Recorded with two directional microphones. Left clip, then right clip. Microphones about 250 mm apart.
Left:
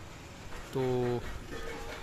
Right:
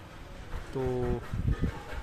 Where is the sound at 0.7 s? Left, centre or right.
Centre.